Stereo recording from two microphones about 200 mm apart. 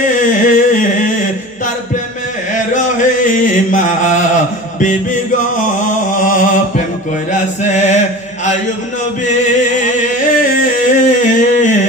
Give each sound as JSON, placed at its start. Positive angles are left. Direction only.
{"t": 0.0, "sound": "a sound", "side_deg": 40}
{"t": 2.5, "sound": "chant", "side_deg": 40}
{"t": 6.1, "sound": "mantra", "side_deg": 40}
{"t": 7.3, "sound": "chant", "side_deg": 35}
{"t": 9.3, "sound": "music", "side_deg": 35}
{"t": 10.4, "sound": "a sound", "side_deg": 40}